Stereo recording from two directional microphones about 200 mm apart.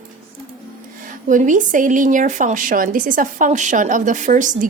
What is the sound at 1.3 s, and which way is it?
A woman's voice, 40° right (ahead or behind).